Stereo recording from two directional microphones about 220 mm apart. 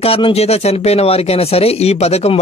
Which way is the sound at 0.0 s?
25° left (ahead or behind).